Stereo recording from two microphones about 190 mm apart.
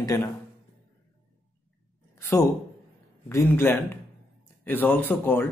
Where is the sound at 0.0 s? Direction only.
20° left (ahead or behind).